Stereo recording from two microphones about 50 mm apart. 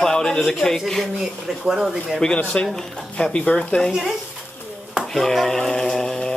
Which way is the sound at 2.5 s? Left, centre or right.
Left.